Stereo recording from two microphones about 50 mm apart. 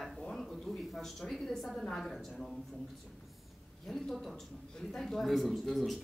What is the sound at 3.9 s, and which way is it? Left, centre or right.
Speech, centre.